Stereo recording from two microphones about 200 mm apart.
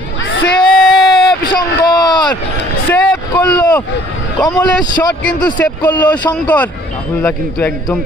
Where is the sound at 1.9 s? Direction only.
20° left (ahead or behind).